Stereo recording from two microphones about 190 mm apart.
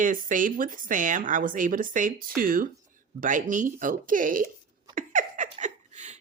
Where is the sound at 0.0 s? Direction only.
45° right (ahead or behind).